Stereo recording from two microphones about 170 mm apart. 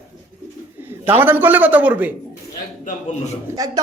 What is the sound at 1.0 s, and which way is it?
A man's voice, 10° right (ahead or behind).